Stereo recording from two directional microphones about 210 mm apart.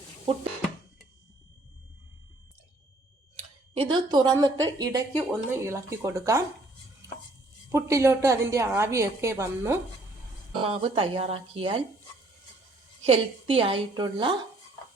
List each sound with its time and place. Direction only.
3.3 s speech: 25° right (ahead or behind)
7.7 s speech: 15° right (ahead or behind)
10.5 s speech: 25° right (ahead or behind)
13.1 s speech: 25° right (ahead or behind)